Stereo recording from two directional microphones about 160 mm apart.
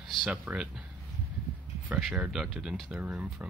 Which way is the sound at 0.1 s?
5° right (ahead or behind).